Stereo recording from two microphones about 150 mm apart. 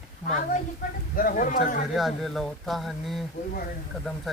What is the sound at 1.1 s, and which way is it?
Speech, 65° left (ahead or behind).